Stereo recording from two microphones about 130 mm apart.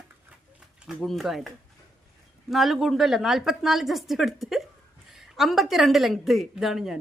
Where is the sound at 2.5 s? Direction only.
Centre (ahead or behind).